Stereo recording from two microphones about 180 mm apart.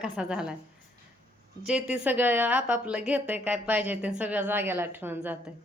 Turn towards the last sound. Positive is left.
turn(degrees=-10)  # may be behind; listen again after turning